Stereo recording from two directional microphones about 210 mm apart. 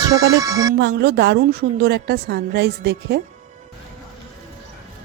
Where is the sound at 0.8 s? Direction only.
50° right (ahead or behind).